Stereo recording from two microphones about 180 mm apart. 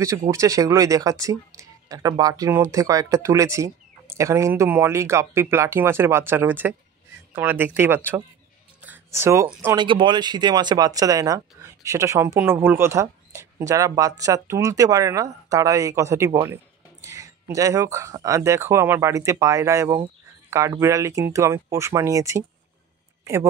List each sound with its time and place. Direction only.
0.3 s speech: 20° right (ahead or behind)
8.8 s a sound: 10° right (ahead or behind)
9.5 s speech: 10° right (ahead or behind)
9.8 s speech: 25° right (ahead or behind)